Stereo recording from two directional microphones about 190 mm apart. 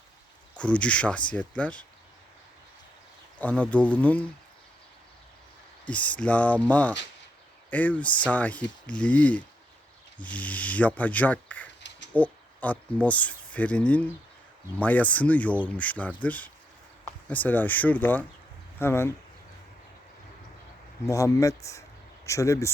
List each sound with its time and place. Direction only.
0.5 s speech: 5° left (ahead or behind)
3.3 s speech: 10° left (ahead or behind)
5.8 s speech: 5° left (ahead or behind)
12.1 s a sound: 5° left (ahead or behind)
13.0 s speech: 5° left (ahead or behind)
21.1 s speech: 15° left (ahead or behind)